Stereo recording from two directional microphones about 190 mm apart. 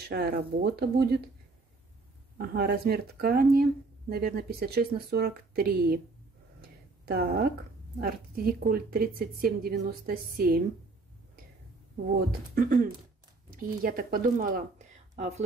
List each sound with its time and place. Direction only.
0.0 s speech: 55° right (ahead or behind)
2.3 s speech: 55° right (ahead or behind)
6.6 s a sound: 55° right (ahead or behind)
8.5 s speech: 50° right (ahead or behind)
12.5 s a woman's voice: 45° right (ahead or behind)